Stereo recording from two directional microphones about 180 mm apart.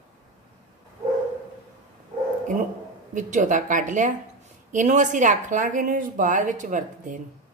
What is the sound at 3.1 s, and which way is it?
A woman's voice, 45° right (ahead or behind).